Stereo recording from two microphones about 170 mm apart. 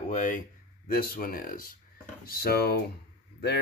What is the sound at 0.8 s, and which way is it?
Speech, 60° left (ahead or behind).